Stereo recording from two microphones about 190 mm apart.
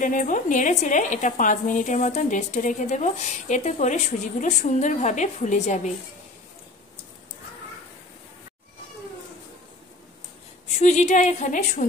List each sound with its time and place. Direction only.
0.0 s a woman's voice: 45° left (ahead or behind)
10.8 s a woman's voice: 35° left (ahead or behind)